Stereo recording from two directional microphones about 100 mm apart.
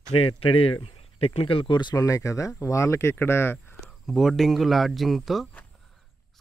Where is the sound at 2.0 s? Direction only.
35° left (ahead or behind).